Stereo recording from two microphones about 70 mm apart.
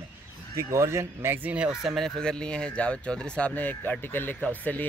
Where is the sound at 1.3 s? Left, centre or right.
Right.